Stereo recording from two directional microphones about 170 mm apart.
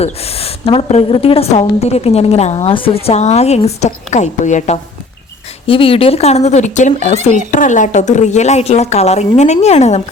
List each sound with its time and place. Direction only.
0.0 s a woman's voice: 35° left (ahead or behind)
5.6 s a woman's voice: 35° left (ahead or behind)